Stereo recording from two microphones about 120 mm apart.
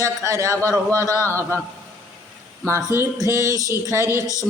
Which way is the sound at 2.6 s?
20° right (ahead or behind).